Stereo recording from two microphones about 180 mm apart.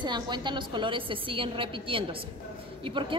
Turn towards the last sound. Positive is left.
turn(degrees=-30)  # may be behind; listen again after turning